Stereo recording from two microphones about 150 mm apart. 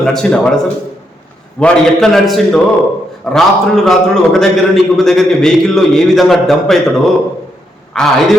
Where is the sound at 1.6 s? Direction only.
5° left (ahead or behind).